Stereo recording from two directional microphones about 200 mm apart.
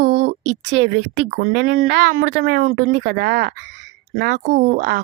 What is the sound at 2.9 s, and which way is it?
Speech, 55° right (ahead or behind).